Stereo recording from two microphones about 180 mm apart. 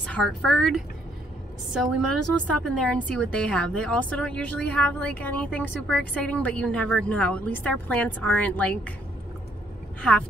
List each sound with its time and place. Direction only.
0.0 s a woman's voice: 5° left (ahead or behind)